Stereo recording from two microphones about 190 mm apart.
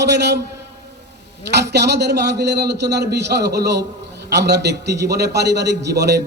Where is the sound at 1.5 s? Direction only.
60° right (ahead or behind).